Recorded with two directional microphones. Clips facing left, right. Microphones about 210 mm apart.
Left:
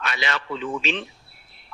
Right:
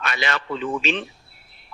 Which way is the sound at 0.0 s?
50° right (ahead or behind).